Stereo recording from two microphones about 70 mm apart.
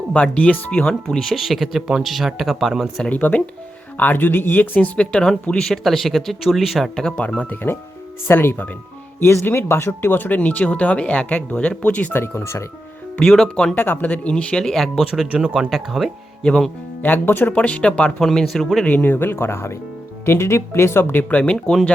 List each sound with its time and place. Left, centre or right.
0.1 s speech: centre
3.1 s speech: left
5.2 s speech: centre
6.9 s speech: centre; by 8.7 s left
9.2 s speech: left
12.1 s speech: left
13.1 s speech: centre
13.7 s speech: left
14.3 s speech: centre
15.1 s speech: centre
16.4 s speech: centre
17.0 s speech: left
18.2 s speech: centre
18.9 s speech: left